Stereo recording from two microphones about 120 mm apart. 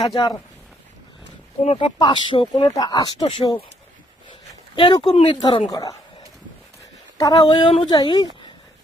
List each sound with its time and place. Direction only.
0.1 s speech: 35° left (ahead or behind)
1.6 s speech: 45° left (ahead or behind)
4.7 s speech: 40° left (ahead or behind)
5.4 s speech: 40° left (ahead or behind)
7.2 s speech: 30° left (ahead or behind)